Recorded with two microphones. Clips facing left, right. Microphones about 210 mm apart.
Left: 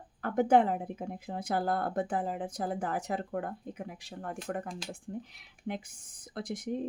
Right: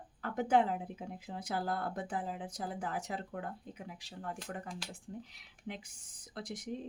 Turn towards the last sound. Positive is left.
turn(degrees=55)  # may be behind; listen again after turning